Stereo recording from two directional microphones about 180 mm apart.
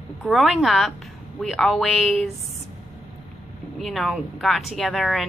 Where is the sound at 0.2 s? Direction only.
Centre (ahead or behind).